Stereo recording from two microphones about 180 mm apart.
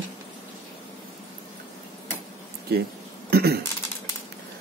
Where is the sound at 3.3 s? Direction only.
60° right (ahead or behind).